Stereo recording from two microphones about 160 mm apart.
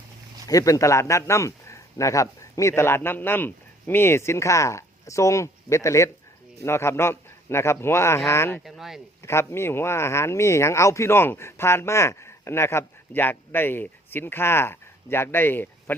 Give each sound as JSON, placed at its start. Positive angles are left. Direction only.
{"t": 0.4, "sound": "speech", "side_deg": 20}
{"t": 8.6, "sound": "speech", "side_deg": 0}
{"t": 9.2, "sound": "speech", "side_deg": 15}